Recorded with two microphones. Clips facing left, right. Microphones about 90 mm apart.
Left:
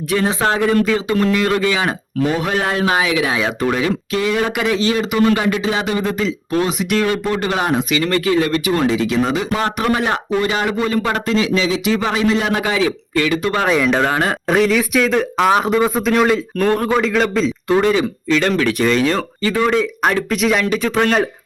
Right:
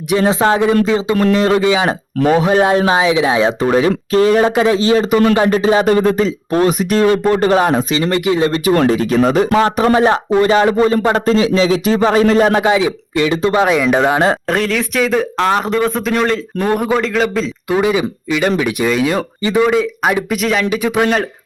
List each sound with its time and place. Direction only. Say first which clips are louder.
0.1 s speech: right 5 dB; 25° right (ahead or behind)
1.1 s speech: right 4 dB; 35° right (ahead or behind)
8.7 s speech: right 5 dB; 50° right (ahead or behind)
9.6 s speech: right 6 dB; 30° right (ahead or behind)
12.6 s speech: right 4 dB; 20° right (ahead or behind)
13.7 s speech: right 2 dB; centre (ahead or behind)
13.9 s a man's voice: right 4 dB; 15° right (ahead or behind)
14.4 s a man's voice: left 2 dB; centre (ahead or behind)
19.4 s speech: right 7 dB; 20° right (ahead or behind)
19.6 s speech: left 1 dB; 5° right (ahead or behind)